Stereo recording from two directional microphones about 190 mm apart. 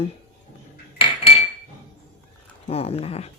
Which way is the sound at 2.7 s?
30° left (ahead or behind).